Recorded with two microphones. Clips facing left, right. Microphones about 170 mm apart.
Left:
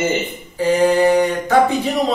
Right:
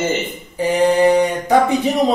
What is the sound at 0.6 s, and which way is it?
Speech, 20° right (ahead or behind).